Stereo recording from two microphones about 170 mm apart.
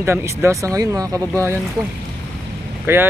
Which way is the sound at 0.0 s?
15° right (ahead or behind).